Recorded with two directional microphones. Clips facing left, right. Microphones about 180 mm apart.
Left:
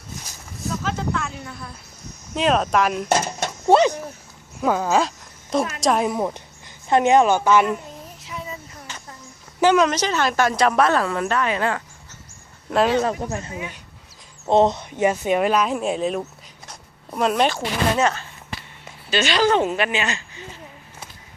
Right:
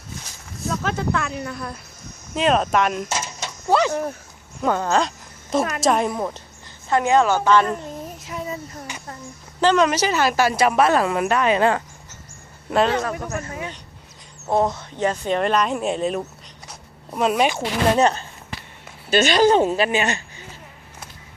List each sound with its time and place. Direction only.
0.8 s speech: 60° right (ahead or behind); by 1.7 s 85° right
2.3 s speech: centre (ahead or behind)
3.1 s speech: 55° left (ahead or behind)
3.7 s speech: 20° left (ahead or behind)
4.6 s speech: 5° left (ahead or behind)
6.8 s speech: 20° left (ahead or behind)
8.2 s a sound: 45° right (ahead or behind)
8.9 s a sound: 10° right (ahead or behind)
9.6 s a sound: 10° left (ahead or behind)
9.8 s a woman's voice: 5° right (ahead or behind)
13.0 s speech: 20° left (ahead or behind); by 16.2 s centre (ahead or behind)
16.6 s zipper: centre (ahead or behind)
17.9 s speech: 35° right (ahead or behind)